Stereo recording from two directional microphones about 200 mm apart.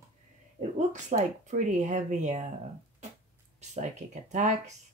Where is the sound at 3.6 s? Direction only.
35° right (ahead or behind).